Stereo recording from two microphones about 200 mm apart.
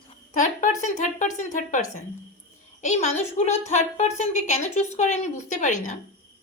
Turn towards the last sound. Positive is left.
turn(degrees=40)  # may be behind; listen again after turning